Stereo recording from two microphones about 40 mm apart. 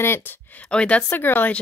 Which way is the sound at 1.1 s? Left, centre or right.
Left.